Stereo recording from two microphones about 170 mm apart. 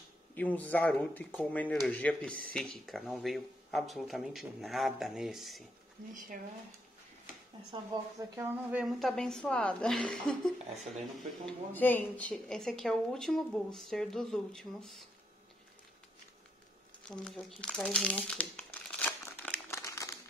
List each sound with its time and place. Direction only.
0.3 s speech: 10° left (ahead or behind)
6.1 s speech: 55° right (ahead or behind)
7.9 s speech: 15° right (ahead or behind)
8.8 s speech: centre (ahead or behind)
11.7 s speech: 10° left (ahead or behind)
17.1 s crumpling: 5° left (ahead or behind)